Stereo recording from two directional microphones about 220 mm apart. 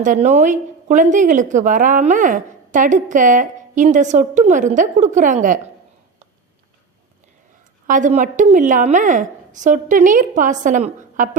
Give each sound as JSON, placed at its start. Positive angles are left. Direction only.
{"t": 0.0, "sound": "a woman's voice", "side_deg": -35}
{"t": 7.9, "sound": "a woman's voice", "side_deg": -35}